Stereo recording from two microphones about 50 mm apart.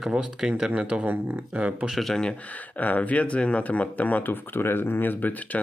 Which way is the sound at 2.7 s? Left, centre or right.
Left.